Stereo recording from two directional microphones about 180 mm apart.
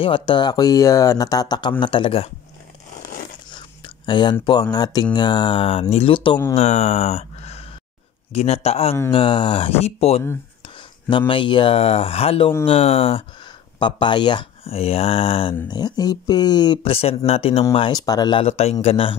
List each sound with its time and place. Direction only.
0.0 s speech: 25° left (ahead or behind)
3.5 s speech: 25° left (ahead or behind)
6.5 s a sound: 35° left (ahead or behind)
8.3 s speech: 35° left (ahead or behind)
18.4 s speech: 35° left (ahead or behind)